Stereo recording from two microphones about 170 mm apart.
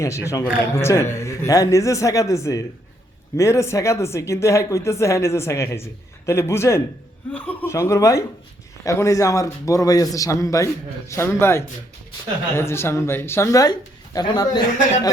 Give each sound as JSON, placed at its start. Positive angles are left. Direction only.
{"t": 0.0, "sound": "a man's voice", "side_deg": 15}